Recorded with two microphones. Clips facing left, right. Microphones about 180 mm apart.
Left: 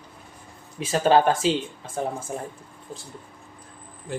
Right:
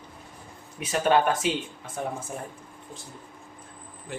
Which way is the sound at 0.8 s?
30° left (ahead or behind).